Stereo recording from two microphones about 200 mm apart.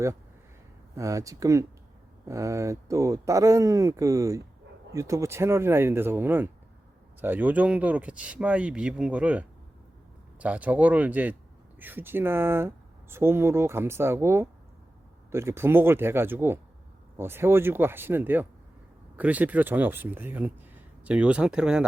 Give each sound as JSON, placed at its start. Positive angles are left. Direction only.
{"t": 0.9, "sound": "speech", "side_deg": -15}